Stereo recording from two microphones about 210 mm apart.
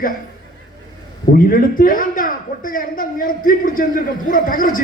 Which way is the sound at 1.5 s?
40° left (ahead or behind).